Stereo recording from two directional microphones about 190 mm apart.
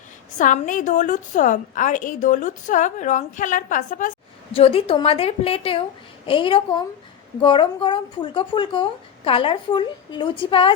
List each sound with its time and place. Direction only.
0.3 s a woman's voice: 40° left (ahead or behind)
4.5 s speech: 30° left (ahead or behind)